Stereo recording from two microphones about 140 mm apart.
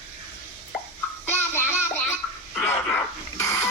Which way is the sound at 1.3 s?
15° left (ahead or behind).